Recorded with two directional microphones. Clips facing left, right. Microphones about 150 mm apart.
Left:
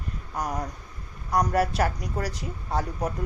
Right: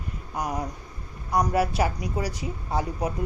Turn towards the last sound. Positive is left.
turn(degrees=-10)  # may be behind; listen again after turning